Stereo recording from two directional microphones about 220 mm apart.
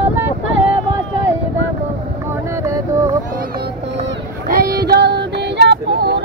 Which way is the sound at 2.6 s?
15° right (ahead or behind).